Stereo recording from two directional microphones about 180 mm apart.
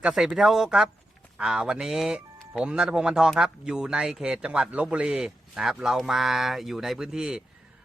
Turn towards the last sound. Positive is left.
turn(degrees=-5)  # may be behind; listen again after turning